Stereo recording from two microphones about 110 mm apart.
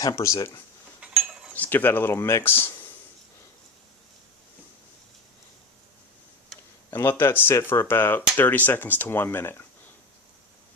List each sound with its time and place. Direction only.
0.0 s speech: 30° left (ahead or behind)
1.0 s a sound: 10° right (ahead or behind)
1.5 s speech: 15° left (ahead or behind)
6.9 s speech: 20° left (ahead or behind)